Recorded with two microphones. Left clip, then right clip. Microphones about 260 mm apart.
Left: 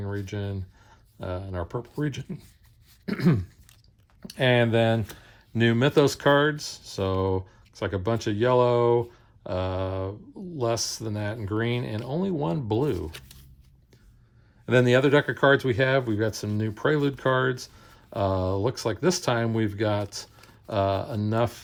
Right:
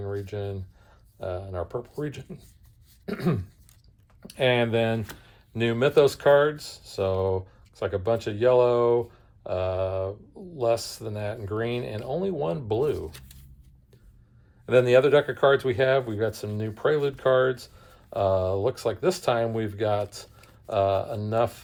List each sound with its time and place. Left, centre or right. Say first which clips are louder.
0.0 s speech: right 2 dB; left
14.7 s speech: right 2 dB; left